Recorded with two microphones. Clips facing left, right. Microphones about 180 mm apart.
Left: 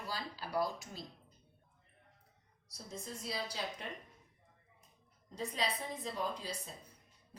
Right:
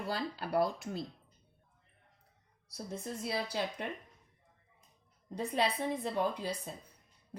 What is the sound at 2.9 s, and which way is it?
Speech, 60° right (ahead or behind).